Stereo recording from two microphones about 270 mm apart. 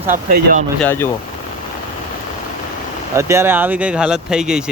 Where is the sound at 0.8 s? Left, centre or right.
Centre.